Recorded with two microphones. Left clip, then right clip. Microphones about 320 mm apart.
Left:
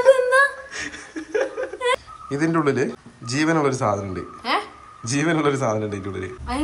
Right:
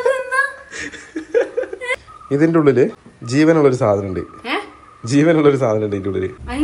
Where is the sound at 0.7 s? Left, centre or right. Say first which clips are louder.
Right 3 dB; centre.